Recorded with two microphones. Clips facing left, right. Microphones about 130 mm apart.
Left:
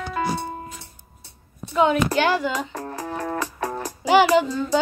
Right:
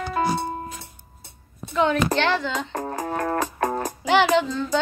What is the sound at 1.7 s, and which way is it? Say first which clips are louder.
Child singing: left 2 dB; 10° left (ahead or behind).